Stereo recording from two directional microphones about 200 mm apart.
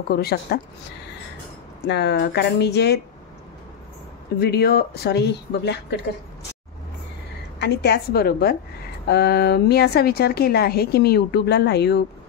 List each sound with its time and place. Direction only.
0.1 s speech: 55° left (ahead or behind)
1.9 s speech: 60° left (ahead or behind)
4.4 s speech: 50° left (ahead or behind)
7.5 s speech: 55° left (ahead or behind)